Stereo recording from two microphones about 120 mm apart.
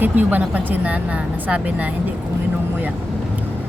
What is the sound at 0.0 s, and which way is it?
Speech, 15° right (ahead or behind).